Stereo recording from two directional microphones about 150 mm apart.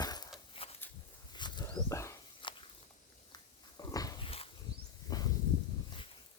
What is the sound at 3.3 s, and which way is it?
Dog, 25° left (ahead or behind).